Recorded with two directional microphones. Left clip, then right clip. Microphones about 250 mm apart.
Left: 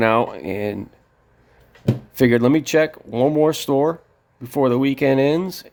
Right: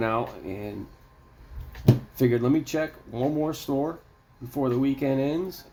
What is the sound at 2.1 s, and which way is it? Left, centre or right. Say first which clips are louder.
Speech: left 9 dB; left.